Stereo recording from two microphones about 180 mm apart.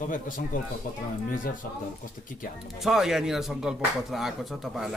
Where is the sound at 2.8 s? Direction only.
Centre (ahead or behind).